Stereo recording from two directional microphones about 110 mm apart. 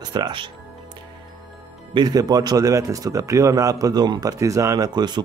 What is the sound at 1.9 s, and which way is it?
A man's voice, 35° right (ahead or behind).